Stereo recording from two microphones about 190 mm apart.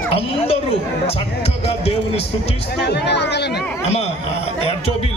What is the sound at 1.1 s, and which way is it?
Speech, 35° left (ahead or behind).